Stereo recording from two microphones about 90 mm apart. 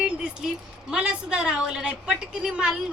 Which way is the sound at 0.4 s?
5° right (ahead or behind).